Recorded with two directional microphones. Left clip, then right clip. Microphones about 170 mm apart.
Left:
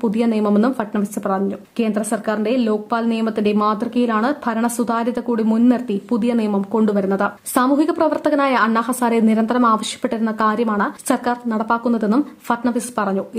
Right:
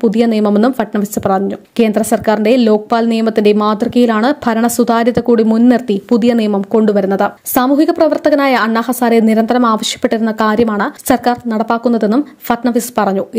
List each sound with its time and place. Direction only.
0.0 s a woman's voice: 25° right (ahead or behind)